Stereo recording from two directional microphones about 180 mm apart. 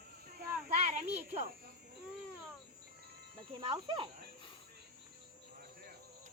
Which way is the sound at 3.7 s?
25° right (ahead or behind).